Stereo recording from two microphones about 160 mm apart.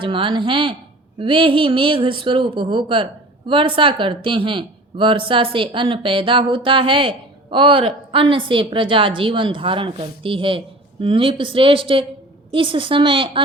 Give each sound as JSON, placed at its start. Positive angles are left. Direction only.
{"t": 0.0, "sound": "speech", "side_deg": -30}